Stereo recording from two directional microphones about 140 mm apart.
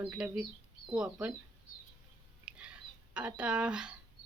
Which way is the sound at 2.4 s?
10° right (ahead or behind).